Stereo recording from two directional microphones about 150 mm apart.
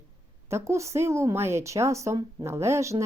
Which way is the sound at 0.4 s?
20° right (ahead or behind).